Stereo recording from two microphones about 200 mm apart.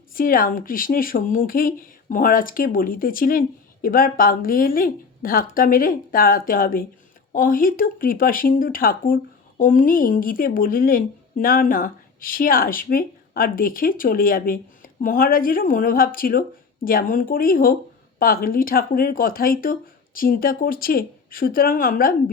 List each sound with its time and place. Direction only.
0.1 s a woman's voice: 45° left (ahead or behind)